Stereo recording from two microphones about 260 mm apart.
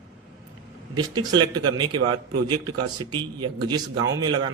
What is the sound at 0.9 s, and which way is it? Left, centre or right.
Speech, centre.